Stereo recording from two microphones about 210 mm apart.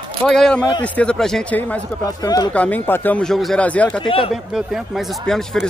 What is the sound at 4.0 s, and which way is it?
Speech, 25° left (ahead or behind).